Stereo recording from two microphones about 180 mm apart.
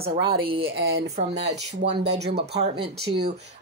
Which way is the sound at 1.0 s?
40° right (ahead or behind).